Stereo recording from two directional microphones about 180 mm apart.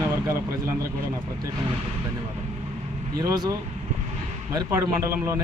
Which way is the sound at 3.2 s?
20° right (ahead or behind).